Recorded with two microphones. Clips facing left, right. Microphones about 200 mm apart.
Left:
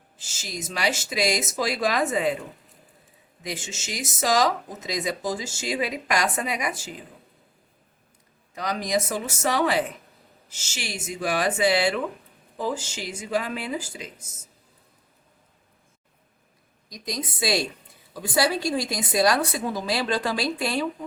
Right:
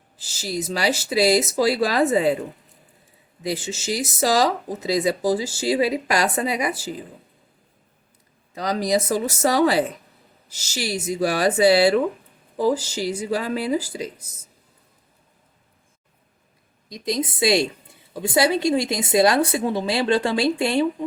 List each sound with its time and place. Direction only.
0.2 s speech: 35° right (ahead or behind)
3.4 s speech: 35° right (ahead or behind)
8.5 s speech: 35° right (ahead or behind)
16.9 s speech: 25° right (ahead or behind)